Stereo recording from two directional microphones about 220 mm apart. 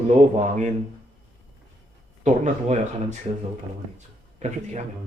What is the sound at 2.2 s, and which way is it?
Speech, 35° right (ahead or behind).